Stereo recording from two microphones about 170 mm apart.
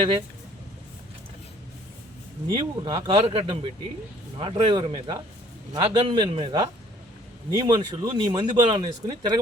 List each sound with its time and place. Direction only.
2.5 s speech: 30° right (ahead or behind)